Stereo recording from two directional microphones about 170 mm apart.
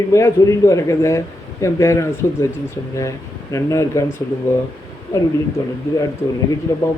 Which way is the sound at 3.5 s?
15° left (ahead or behind).